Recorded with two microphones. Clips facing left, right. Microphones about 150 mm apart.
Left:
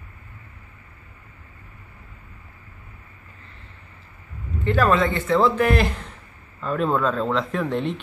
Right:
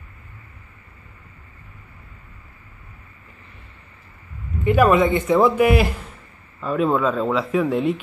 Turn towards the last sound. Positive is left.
turn(degrees=-5)  # may be behind; listen again after turning